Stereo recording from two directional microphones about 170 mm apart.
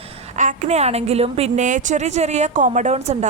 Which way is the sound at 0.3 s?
45° right (ahead or behind).